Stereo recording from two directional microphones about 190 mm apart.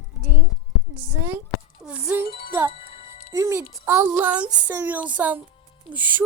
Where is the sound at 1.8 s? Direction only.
5° right (ahead or behind).